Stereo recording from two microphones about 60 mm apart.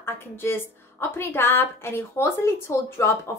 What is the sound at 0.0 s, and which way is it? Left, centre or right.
A woman's voice, left.